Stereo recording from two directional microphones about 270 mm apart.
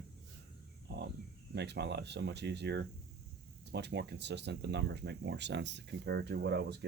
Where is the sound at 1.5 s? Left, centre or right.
Right.